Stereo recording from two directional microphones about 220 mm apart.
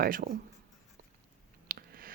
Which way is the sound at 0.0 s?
40° right (ahead or behind).